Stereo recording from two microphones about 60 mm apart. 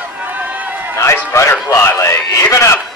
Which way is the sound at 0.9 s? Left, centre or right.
Left.